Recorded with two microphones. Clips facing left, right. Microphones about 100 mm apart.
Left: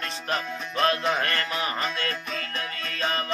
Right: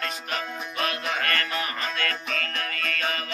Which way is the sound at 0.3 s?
30° left (ahead or behind).